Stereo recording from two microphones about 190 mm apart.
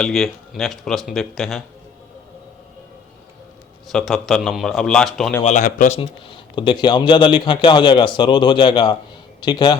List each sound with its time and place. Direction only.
0.0 s speech: centre (ahead or behind)
3.8 s speech: centre (ahead or behind)
5.4 s speech: 40° left (ahead or behind)
6.0 s a man's voice: 25° left (ahead or behind)